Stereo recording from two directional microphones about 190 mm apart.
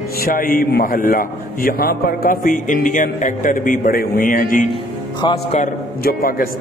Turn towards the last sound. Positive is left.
turn(degrees=50)  # may be behind; listen again after turning